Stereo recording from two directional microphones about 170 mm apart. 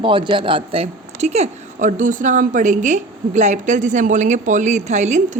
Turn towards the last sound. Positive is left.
turn(degrees=-45)  # may be behind; listen again after turning